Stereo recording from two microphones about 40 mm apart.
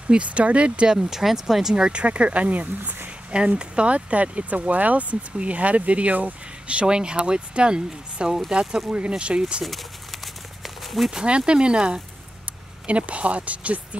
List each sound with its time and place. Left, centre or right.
0.1 s speech: right
0.9 s speech: centre
1.9 s speech: right
3.5 s speech: right
10.2 s a sound: centre
11.2 s speech: right